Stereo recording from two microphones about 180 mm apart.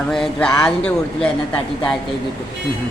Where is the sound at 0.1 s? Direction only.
5° left (ahead or behind).